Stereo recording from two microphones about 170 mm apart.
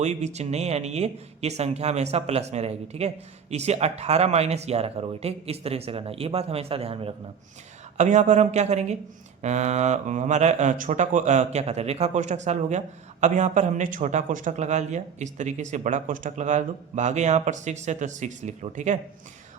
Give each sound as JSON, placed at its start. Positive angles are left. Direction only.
{"t": 0.0, "sound": "speech", "side_deg": -40}
{"t": 7.9, "sound": "speech", "side_deg": -45}